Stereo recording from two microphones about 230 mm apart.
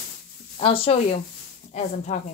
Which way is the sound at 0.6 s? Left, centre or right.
Left.